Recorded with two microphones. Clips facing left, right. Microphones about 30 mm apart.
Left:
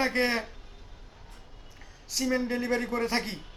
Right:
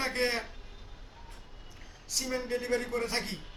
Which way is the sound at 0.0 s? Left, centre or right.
Centre.